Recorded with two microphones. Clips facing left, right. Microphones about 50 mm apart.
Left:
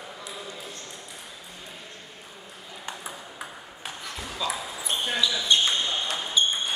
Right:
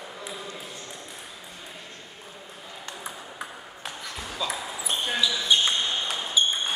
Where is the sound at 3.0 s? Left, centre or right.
Centre.